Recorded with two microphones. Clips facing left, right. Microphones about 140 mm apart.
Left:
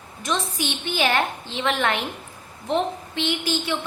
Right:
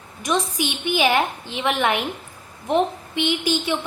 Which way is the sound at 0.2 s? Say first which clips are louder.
Right 4 dB; 15° right (ahead or behind).